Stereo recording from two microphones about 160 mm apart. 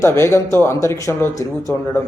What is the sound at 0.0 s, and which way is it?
A man's voice, 15° left (ahead or behind).